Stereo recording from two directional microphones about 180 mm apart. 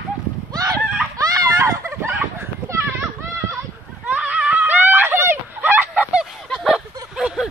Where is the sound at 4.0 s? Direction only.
5° right (ahead or behind).